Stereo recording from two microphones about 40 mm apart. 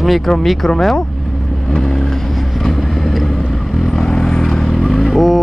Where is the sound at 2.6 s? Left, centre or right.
Centre.